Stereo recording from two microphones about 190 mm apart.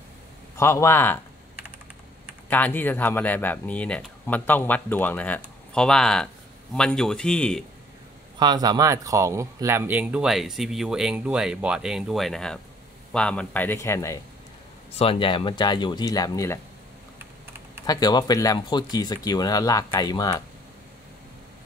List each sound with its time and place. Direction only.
0.6 s speech: 15° left (ahead or behind)
2.5 s speech: 10° left (ahead or behind)
8.4 s speech: 20° right (ahead or behind); by 14.2 s 15° left (ahead or behind)
15.0 s speech: 30° left (ahead or behind)
17.8 s speech: 20° left (ahead or behind)